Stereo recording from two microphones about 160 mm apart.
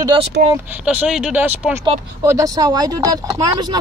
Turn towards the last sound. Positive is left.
turn(degrees=-25)  # may be behind; listen again after turning